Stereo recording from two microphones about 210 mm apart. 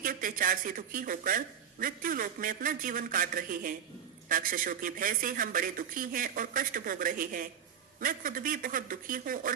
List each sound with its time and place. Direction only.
0.0 s a man's voice: 40° right (ahead or behind)